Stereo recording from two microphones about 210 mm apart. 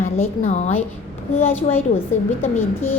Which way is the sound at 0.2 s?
30° left (ahead or behind).